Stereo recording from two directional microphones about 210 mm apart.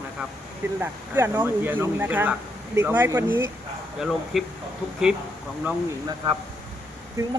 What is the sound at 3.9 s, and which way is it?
Speech, centre (ahead or behind).